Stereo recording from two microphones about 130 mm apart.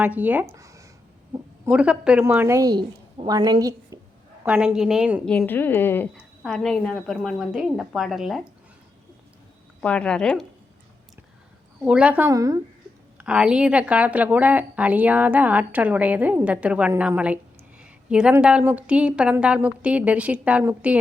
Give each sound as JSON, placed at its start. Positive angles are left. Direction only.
{"t": 0.0, "sound": "speech", "side_deg": -15}
{"t": 0.4, "sound": "a sound", "side_deg": -25}
{"t": 1.7, "sound": "speech", "side_deg": -10}
{"t": 2.2, "sound": "a woman's voice", "side_deg": -20}
{"t": 4.6, "sound": "a woman's voice", "side_deg": -5}
{"t": 5.2, "sound": "a woman's voice", "side_deg": 5}
{"t": 6.4, "sound": "a woman's voice", "side_deg": 0}
{"t": 9.8, "sound": "a woman's voice", "side_deg": 10}
{"t": 11.8, "sound": "speech", "side_deg": -10}
{"t": 12.3, "sound": "a woman's voice", "side_deg": -25}
{"t": 13.1, "sound": "speech", "side_deg": -5}